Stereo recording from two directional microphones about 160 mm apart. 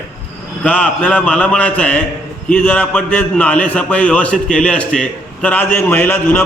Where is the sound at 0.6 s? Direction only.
10° left (ahead or behind).